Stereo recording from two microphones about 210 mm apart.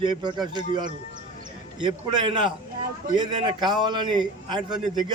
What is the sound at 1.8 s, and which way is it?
A man's voice, 20° right (ahead or behind).